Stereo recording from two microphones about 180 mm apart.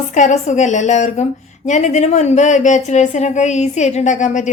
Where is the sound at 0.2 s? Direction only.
40° left (ahead or behind).